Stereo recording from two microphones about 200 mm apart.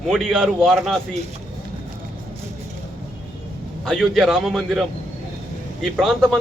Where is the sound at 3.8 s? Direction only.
Centre (ahead or behind).